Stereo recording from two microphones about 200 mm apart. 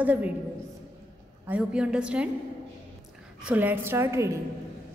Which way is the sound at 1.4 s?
5° right (ahead or behind).